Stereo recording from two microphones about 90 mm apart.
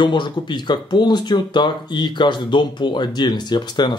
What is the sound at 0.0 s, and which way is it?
Speech, 60° left (ahead or behind).